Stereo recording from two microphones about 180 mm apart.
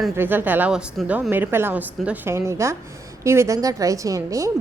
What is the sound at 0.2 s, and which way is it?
A woman's voice, 10° right (ahead or behind).